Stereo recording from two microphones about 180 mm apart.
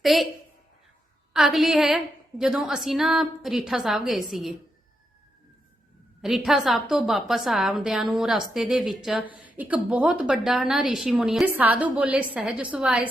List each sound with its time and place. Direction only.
0.0 s a woman's voice: centre (ahead or behind)
1.3 s a woman's voice: centre (ahead or behind)
6.2 s a woman's voice: centre (ahead or behind)